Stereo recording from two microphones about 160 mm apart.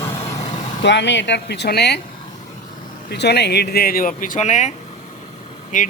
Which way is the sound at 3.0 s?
90° left.